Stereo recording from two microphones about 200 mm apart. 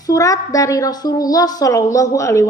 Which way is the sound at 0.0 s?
15° left (ahead or behind).